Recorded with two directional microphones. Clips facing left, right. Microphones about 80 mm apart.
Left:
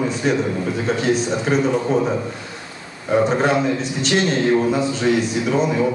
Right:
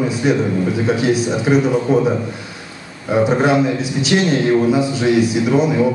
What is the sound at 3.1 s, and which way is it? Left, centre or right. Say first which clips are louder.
A man's voice: right 2 dB; centre.